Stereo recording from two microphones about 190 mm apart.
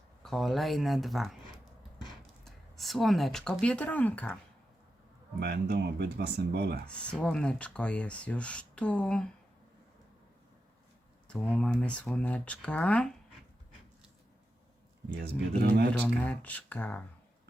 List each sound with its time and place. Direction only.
0.2 s speech: centre (ahead or behind)
2.4 s speech: centre (ahead or behind)
5.4 s speech: 60° right (ahead or behind)
6.8 s speech: 5° left (ahead or behind)
11.3 s speech: 5° left (ahead or behind)
15.1 s speech: 55° right (ahead or behind)
16.0 s speech: 5° left (ahead or behind)